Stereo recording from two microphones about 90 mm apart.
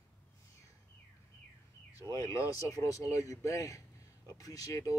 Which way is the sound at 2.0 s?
35° left (ahead or behind).